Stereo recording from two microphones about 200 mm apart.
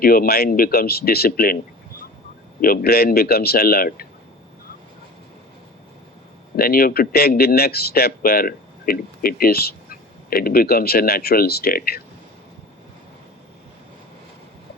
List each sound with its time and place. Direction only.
0.0 s a man's voice: 50° left (ahead or behind)
2.6 s a man's voice: 50° left (ahead or behind)
6.6 s a man's voice: 45° left (ahead or behind)